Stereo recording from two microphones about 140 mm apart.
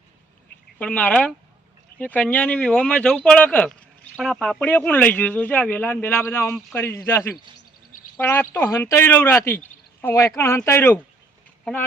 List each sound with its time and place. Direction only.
0.8 s speech: 10° left (ahead or behind)